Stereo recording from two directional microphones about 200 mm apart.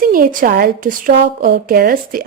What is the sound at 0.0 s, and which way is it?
Speech, 45° right (ahead or behind).